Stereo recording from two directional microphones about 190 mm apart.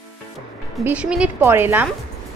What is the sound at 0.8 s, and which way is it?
Speech, 5° right (ahead or behind).